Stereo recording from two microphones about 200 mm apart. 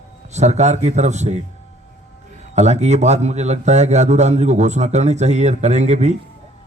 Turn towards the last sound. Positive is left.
turn(degrees=-35)  # may be behind; listen again after turning